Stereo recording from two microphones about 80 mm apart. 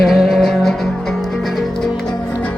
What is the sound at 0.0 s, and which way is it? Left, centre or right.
Music, centre.